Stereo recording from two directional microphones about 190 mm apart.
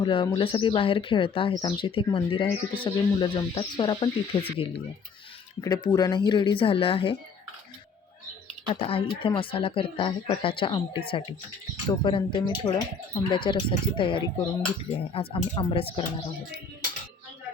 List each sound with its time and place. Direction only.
0.0 s speech: 25° left (ahead or behind)
8.7 s speech: 30° left (ahead or behind)